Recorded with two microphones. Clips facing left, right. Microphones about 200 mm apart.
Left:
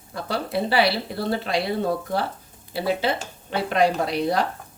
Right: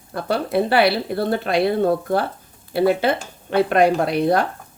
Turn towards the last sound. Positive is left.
turn(degrees=-55)  # may be behind; listen again after turning